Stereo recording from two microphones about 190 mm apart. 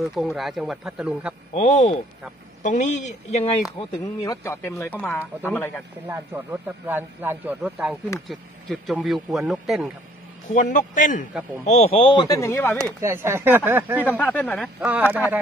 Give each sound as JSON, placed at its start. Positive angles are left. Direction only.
{"t": 0.0, "sound": "speech", "side_deg": 0}
{"t": 1.5, "sound": "speech", "side_deg": 35}
{"t": 4.2, "sound": "speech", "side_deg": 15}
{"t": 6.0, "sound": "speech", "side_deg": -10}
{"t": 10.5, "sound": "a man's voice", "side_deg": 45}
{"t": 13.0, "sound": "speech", "side_deg": -15}
{"t": 14.0, "sound": "speech", "side_deg": 10}
{"t": 14.9, "sound": "speech", "side_deg": -10}